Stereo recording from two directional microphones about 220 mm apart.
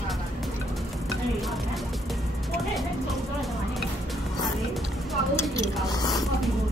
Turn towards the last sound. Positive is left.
turn(degrees=20)  # may be behind; listen again after turning